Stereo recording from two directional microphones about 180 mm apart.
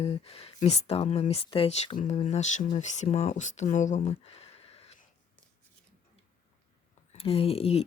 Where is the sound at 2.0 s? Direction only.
40° left (ahead or behind).